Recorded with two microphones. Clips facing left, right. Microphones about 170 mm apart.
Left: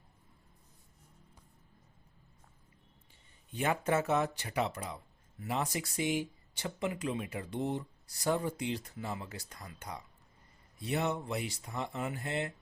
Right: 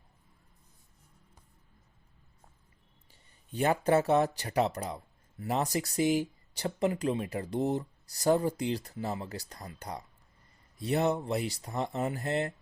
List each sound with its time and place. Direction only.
3.1 s speech: 35° right (ahead or behind)